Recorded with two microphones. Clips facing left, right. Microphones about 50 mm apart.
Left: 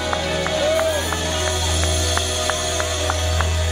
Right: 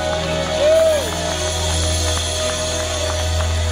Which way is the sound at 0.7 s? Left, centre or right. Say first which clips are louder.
Right 5 dB; left.